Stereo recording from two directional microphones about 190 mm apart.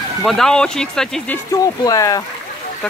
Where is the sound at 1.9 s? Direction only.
20° left (ahead or behind).